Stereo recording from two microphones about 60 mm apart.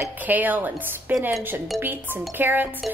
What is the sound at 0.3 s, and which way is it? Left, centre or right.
A woman's voice, right.